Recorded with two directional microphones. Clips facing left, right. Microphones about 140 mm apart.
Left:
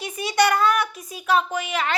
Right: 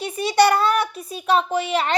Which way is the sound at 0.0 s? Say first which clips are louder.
Right 4 dB; 35° right (ahead or behind).